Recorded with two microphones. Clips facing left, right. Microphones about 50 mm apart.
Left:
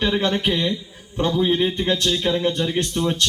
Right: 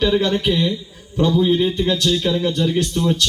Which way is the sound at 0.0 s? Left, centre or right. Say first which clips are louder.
Right 3 dB; left.